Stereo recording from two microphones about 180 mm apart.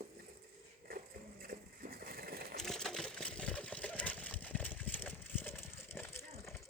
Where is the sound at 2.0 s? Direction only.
55° right (ahead or behind).